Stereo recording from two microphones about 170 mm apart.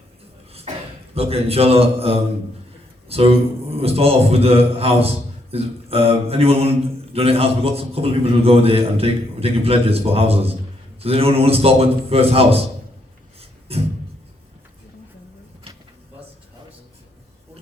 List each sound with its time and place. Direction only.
0.7 s a sound: 40° right (ahead or behind)
1.1 s a man's voice: 35° right (ahead or behind)
13.7 s a man's voice: 35° right (ahead or behind)